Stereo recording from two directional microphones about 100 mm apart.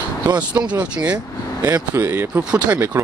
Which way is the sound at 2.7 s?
25° right (ahead or behind).